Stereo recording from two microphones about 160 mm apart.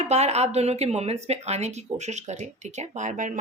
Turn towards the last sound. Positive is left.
turn(degrees=-50)  # may be behind; listen again after turning